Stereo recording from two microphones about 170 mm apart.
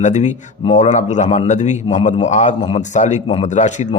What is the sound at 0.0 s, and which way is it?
Speech, 45° left (ahead or behind).